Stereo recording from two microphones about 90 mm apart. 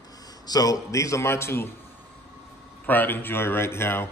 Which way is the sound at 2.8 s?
20° left (ahead or behind).